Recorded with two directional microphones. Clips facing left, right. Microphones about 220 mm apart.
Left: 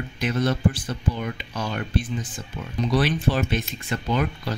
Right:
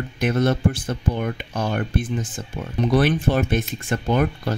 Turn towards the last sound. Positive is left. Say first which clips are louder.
# right 4 dB
turn(degrees=-50)  # may be behind; listen again after turning